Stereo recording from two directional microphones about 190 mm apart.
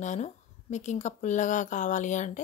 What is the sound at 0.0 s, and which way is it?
Speech, 40° left (ahead or behind).